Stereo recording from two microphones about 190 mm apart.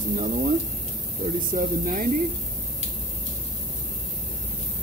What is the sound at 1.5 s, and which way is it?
Speech, 45° right (ahead or behind).